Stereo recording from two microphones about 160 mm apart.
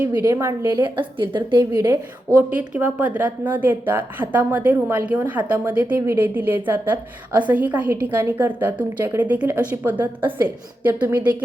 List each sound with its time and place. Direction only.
0.2 s a woman's voice: 15° right (ahead or behind)
0.8 s a woman's voice: 30° right (ahead or behind)
2.6 s a woman's voice: 10° right (ahead or behind)